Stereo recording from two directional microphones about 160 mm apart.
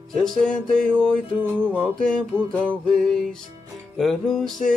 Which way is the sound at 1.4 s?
10° right (ahead or behind).